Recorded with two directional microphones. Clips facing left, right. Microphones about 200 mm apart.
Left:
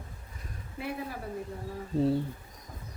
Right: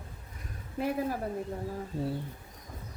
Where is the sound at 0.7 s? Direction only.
40° right (ahead or behind).